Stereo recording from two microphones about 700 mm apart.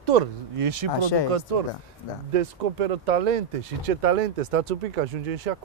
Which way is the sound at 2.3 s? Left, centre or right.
Right.